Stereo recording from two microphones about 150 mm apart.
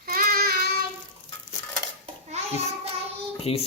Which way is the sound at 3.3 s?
40° left (ahead or behind).